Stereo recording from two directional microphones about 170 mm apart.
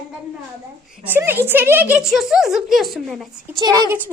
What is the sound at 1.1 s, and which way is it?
A woman's voice, 10° right (ahead or behind).